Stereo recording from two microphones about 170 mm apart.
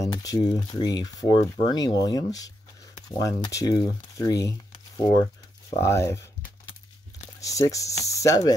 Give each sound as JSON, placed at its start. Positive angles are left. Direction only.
{"t": 0.0, "sound": "speech", "side_deg": 20}
{"t": 7.3, "sound": "speech", "side_deg": 20}